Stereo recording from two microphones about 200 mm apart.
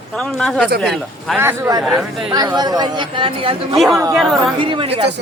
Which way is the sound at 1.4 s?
15° right (ahead or behind).